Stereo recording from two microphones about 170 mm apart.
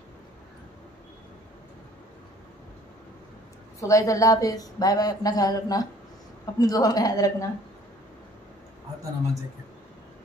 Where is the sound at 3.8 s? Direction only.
20° left (ahead or behind).